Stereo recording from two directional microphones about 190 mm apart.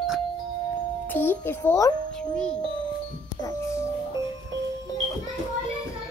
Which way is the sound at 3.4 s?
15° left (ahead or behind).